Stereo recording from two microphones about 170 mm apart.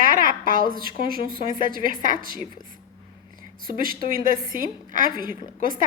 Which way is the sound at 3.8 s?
55° right (ahead or behind).